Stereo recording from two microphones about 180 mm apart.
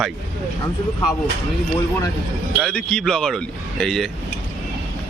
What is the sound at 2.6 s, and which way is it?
A man's voice, 5° left (ahead or behind).